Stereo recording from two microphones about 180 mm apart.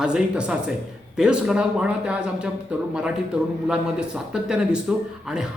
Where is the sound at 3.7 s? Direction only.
5° right (ahead or behind).